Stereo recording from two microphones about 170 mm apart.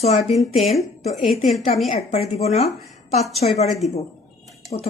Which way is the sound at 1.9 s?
40° left (ahead or behind).